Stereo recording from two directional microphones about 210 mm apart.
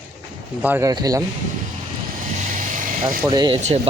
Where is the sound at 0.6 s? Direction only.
10° right (ahead or behind).